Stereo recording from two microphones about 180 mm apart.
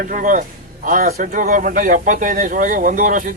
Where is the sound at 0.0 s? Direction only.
50° right (ahead or behind).